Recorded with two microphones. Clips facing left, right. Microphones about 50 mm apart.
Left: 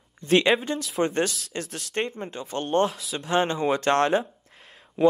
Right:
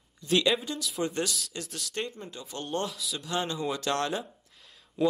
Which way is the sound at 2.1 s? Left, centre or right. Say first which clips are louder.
Left 8 dB; left.